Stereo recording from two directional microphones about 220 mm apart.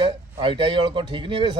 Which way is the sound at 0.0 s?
20° right (ahead or behind).